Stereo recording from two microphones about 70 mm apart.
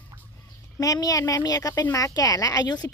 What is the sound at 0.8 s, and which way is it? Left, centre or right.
Speech, left.